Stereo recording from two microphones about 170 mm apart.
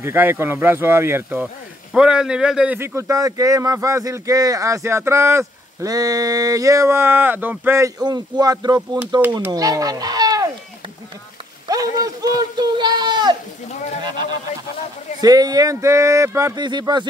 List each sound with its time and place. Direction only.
0.0 s speech: 15° right (ahead or behind)
11.7 s a sound: 20° right (ahead or behind)
15.1 s speech: 20° right (ahead or behind)